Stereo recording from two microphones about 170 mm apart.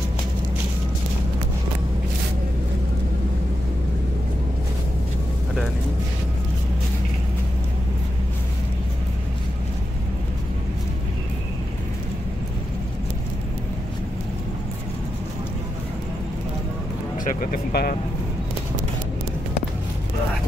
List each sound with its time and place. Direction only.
17.2 s vehicle: 50° left (ahead or behind)